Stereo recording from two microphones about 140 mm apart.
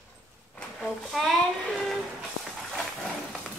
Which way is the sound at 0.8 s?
Centre (ahead or behind).